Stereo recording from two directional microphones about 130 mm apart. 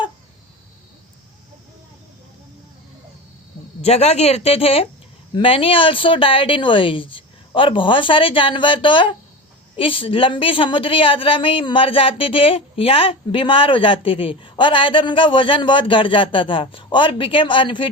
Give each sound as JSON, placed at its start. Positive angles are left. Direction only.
{"t": 3.8, "sound": "a woman's voice", "side_deg": 55}